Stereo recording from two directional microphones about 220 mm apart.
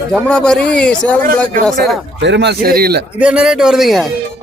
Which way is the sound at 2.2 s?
50° right (ahead or behind).